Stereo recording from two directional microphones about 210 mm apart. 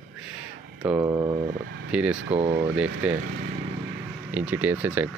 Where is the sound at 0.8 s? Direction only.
10° right (ahead or behind).